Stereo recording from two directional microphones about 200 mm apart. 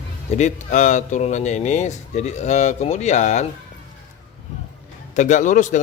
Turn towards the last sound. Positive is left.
turn(degrees=40)  # may be behind; listen again after turning